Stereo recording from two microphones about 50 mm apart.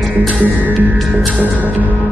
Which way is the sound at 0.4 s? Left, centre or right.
Right.